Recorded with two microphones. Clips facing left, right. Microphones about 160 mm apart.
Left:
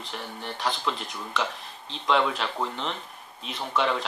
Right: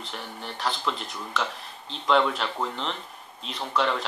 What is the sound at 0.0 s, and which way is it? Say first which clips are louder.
Speech: left 1 dB; centre (ahead or behind).